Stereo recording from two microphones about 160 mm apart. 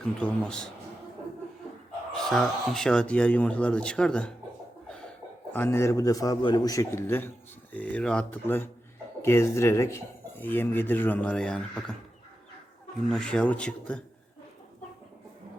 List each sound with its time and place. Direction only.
0.0 s speech: 5° left (ahead or behind)
2.1 s speech: centre (ahead or behind)
5.5 s a man's voice: 15° left (ahead or behind)
13.1 s speech: 5° left (ahead or behind)